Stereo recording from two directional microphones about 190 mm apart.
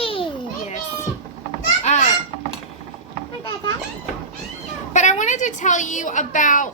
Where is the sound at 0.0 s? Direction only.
30° left (ahead or behind).